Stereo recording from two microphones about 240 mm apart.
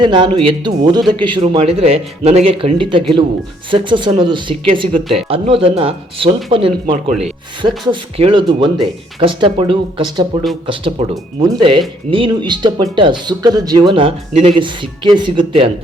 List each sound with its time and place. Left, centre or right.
0.0 s speech: centre